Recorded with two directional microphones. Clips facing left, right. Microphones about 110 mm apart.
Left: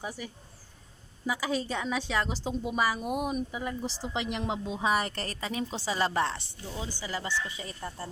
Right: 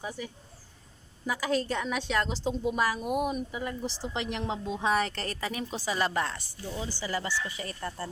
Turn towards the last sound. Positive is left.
turn(degrees=20)  # may be behind; listen again after turning